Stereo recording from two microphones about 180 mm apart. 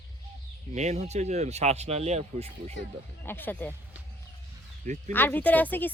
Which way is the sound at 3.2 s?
10° left (ahead or behind).